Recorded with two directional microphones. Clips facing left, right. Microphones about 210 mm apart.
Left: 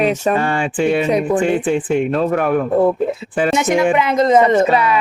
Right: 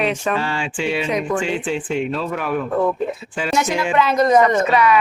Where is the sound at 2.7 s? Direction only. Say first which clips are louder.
Left 4 dB; 25° left (ahead or behind).